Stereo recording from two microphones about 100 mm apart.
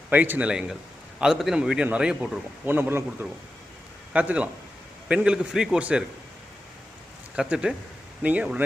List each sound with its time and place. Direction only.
0.1 s a man's voice: 15° right (ahead or behind)
2.6 s a man's voice: 20° right (ahead or behind)
7.3 s a man's voice: 10° right (ahead or behind)